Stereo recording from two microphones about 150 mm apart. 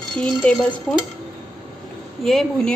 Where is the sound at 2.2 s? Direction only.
Centre (ahead or behind).